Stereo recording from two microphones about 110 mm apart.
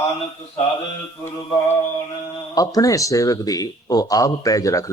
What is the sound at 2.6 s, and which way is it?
Speech, 35° left (ahead or behind).